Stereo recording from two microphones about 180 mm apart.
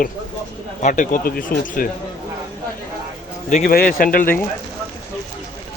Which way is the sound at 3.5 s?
45° left (ahead or behind).